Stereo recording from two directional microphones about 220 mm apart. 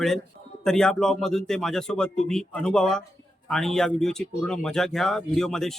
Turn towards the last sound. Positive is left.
turn(degrees=0)  # may be behind; listen again after turning